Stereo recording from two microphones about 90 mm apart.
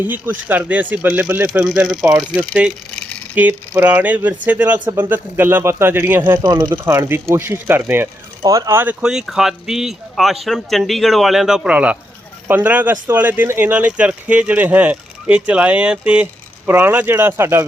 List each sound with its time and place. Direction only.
0.1 s speech: 20° right (ahead or behind)
1.5 s speech: 5° right (ahead or behind)
3.3 s speech: 20° right (ahead or behind)
6.4 s speech: 40° right (ahead or behind)
8.4 s speech: 40° right (ahead or behind)
8.7 s speech: 20° right (ahead or behind)
9.0 s speech: 5° right (ahead or behind)
16.2 s speech: 25° right (ahead or behind)